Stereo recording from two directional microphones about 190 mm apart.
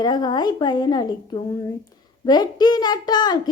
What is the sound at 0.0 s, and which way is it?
A woman's voice, 20° left (ahead or behind).